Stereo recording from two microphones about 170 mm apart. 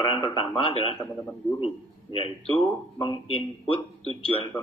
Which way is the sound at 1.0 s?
15° left (ahead or behind).